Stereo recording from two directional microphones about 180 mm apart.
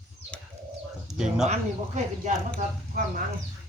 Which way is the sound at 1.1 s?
Centre (ahead or behind).